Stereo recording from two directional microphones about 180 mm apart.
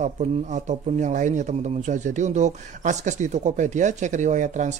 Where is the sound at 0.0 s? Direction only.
40° right (ahead or behind).